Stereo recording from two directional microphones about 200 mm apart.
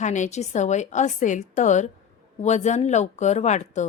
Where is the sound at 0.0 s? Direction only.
35° left (ahead or behind).